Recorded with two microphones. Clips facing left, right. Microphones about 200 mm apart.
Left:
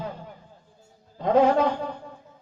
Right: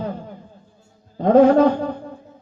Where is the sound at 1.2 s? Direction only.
50° right (ahead or behind).